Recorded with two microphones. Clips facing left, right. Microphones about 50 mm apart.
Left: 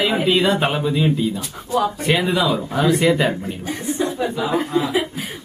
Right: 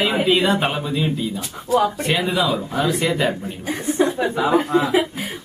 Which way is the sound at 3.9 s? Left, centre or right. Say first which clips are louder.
Right 3 dB; right.